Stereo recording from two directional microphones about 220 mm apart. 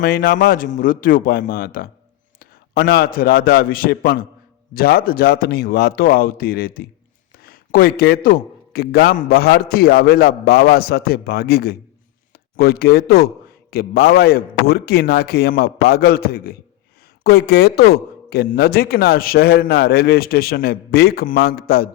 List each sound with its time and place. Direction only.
0.0 s a man's voice: 45° left (ahead or behind)